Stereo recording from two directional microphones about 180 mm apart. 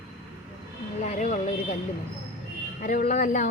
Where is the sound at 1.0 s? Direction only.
40° left (ahead or behind).